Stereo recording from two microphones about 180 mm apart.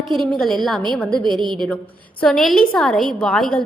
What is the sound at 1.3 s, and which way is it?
Speech, 25° right (ahead or behind).